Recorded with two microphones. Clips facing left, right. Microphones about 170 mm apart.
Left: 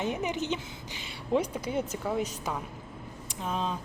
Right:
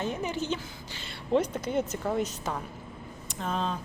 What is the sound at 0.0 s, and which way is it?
Speech, 15° left (ahead or behind).